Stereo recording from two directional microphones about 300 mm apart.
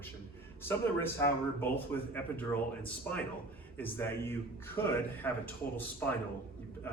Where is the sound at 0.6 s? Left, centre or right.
Centre.